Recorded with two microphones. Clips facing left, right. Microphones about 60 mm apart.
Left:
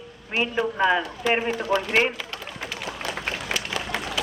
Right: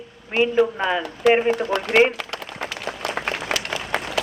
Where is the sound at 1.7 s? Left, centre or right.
Right.